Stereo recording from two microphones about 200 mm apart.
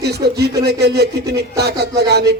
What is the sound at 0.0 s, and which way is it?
Speech, 55° right (ahead or behind).